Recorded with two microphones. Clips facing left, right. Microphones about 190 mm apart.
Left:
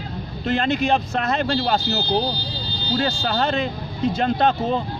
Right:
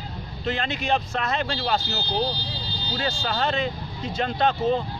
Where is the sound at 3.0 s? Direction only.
40° left (ahead or behind).